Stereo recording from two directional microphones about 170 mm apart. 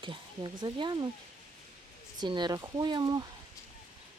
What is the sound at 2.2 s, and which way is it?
Speech, 25° right (ahead or behind).